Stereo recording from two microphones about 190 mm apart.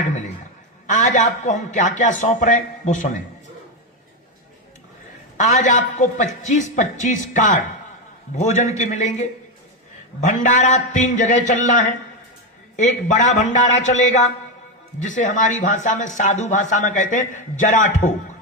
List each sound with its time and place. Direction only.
0.9 s speech: 40° left (ahead or behind)
5.4 s speech: 40° left (ahead or behind)